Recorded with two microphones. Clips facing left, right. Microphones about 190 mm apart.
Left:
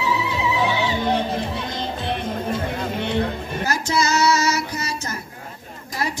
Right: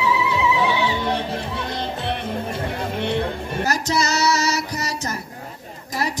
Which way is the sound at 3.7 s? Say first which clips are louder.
Left 1 dB; 35° right (ahead or behind).